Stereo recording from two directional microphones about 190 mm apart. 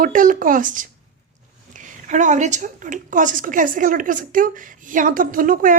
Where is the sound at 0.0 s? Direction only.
45° right (ahead or behind).